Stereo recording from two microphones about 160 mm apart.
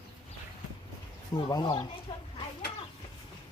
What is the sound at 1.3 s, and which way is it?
Speech, 30° left (ahead or behind).